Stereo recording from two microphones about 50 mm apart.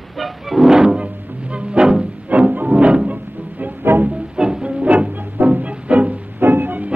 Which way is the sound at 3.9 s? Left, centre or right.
Right.